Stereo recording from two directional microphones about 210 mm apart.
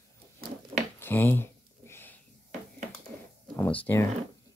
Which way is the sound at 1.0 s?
10° left (ahead or behind).